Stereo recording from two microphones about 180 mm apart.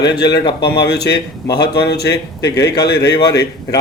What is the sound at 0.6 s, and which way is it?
Speech, 65° left (ahead or behind).